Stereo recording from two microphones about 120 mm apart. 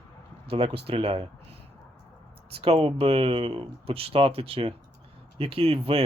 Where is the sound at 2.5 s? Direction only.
55° right (ahead or behind).